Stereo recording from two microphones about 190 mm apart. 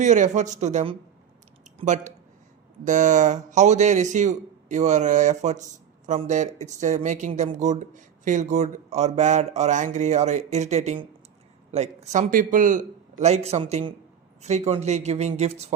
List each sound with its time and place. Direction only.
0.0 s speech: 40° right (ahead or behind)